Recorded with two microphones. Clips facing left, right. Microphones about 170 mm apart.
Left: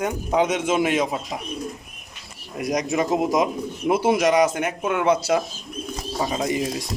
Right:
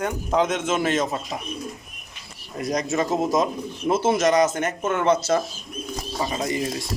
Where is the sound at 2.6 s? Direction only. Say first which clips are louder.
Left 1 dB; 15° left (ahead or behind).